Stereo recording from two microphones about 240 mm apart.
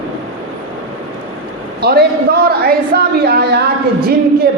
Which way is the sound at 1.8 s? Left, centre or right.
Right.